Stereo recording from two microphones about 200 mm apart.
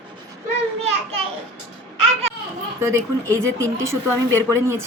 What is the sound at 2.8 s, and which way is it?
Speech, 15° right (ahead or behind).